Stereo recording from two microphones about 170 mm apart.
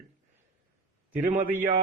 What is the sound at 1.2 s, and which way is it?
Speech, 50° right (ahead or behind).